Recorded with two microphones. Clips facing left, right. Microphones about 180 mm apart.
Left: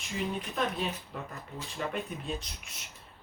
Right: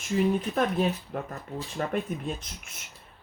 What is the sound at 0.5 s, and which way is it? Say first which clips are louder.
Speech: right 7 dB; 55° right (ahead or behind).